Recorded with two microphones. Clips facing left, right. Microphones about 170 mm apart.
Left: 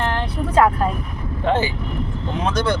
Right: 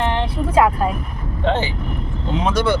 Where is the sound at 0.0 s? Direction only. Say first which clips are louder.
Right 2 dB; 10° right (ahead or behind).